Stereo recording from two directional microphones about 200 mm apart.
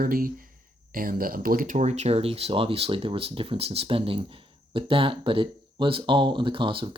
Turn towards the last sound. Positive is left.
turn(degrees=-25)  # may be behind; listen again after turning